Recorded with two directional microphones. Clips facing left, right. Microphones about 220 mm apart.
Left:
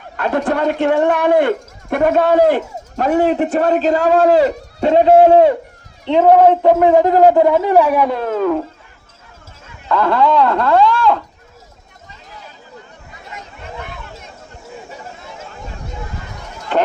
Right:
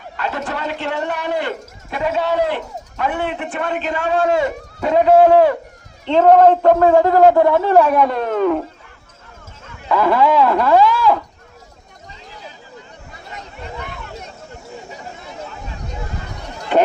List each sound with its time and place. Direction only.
0.2 s a man's voice: 55° left (ahead or behind); by 5.5 s 25° left (ahead or behind)
6.1 s a man's voice: 10° left (ahead or behind)
9.9 s speech: 10° right (ahead or behind)